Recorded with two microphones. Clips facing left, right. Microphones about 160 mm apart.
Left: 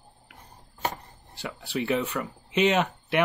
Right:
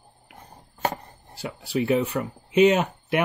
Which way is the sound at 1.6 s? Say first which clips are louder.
Right 4 dB; 40° right (ahead or behind).